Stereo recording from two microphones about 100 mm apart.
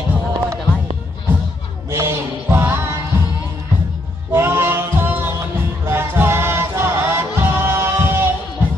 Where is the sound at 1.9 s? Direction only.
25° right (ahead or behind).